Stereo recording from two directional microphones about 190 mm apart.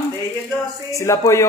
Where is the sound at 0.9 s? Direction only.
15° left (ahead or behind).